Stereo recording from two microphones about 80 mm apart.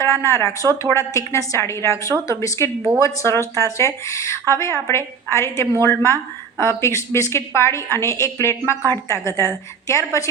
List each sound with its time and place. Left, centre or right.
0.0 s a woman's voice: left